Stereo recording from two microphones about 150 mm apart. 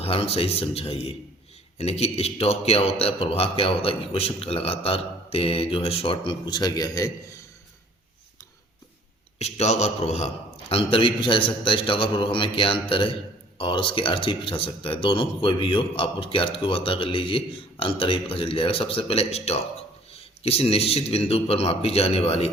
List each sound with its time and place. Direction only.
0.0 s a man's voice: 40° left (ahead or behind); by 7.4 s 20° left (ahead or behind)
9.4 s a man's voice: 50° left (ahead or behind)